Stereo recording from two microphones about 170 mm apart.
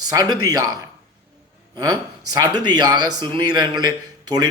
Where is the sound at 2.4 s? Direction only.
25° right (ahead or behind).